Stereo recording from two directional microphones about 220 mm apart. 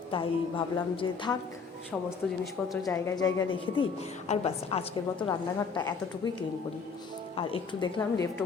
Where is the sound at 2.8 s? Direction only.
15° left (ahead or behind).